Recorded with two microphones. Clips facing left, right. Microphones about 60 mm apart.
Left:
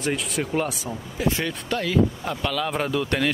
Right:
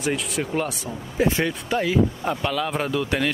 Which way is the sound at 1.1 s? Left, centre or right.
Right.